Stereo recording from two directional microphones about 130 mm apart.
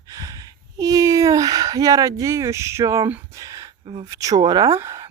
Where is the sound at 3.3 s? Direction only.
25° right (ahead or behind).